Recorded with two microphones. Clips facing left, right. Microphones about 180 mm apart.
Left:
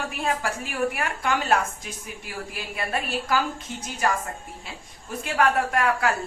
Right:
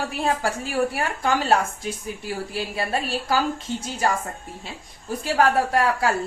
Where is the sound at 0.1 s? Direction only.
35° right (ahead or behind).